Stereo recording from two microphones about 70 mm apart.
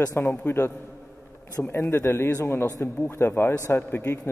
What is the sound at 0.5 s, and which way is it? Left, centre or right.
Speech, left.